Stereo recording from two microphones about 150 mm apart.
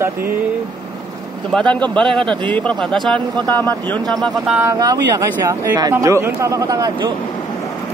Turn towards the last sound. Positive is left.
turn(degrees=-25)  # may be behind; listen again after turning